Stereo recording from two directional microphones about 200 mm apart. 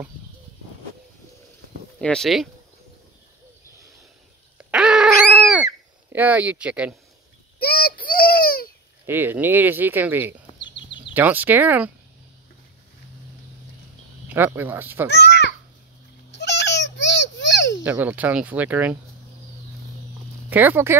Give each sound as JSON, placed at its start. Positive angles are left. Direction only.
{"t": 2.0, "sound": "speech", "side_deg": 5}
{"t": 4.6, "sound": "dog", "side_deg": -5}
{"t": 6.1, "sound": "speech", "side_deg": -10}
{"t": 7.5, "sound": "a sound", "side_deg": 50}
{"t": 9.0, "sound": "speech", "side_deg": -10}
{"t": 10.6, "sound": "a sound", "side_deg": 25}
{"t": 11.1, "sound": "speech", "side_deg": -10}
{"t": 14.3, "sound": "speech", "side_deg": -10}
{"t": 15.0, "sound": "a sound", "side_deg": 60}
{"t": 17.8, "sound": "speech", "side_deg": -10}
{"t": 20.4, "sound": "speech", "side_deg": -10}